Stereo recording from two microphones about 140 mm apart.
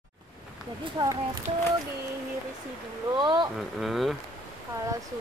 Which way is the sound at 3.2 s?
35° right (ahead or behind).